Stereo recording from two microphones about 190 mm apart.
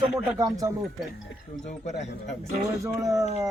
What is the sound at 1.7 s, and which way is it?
Speech, 35° left (ahead or behind).